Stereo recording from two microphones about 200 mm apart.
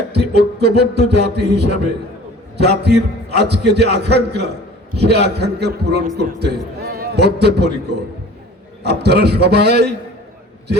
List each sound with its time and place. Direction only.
0.1 s a man's voice: 55° right (ahead or behind)